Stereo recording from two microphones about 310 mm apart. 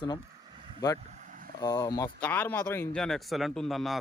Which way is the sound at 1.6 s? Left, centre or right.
Centre.